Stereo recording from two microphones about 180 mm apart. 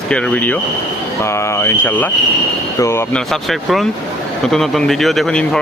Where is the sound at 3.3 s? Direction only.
Centre (ahead or behind).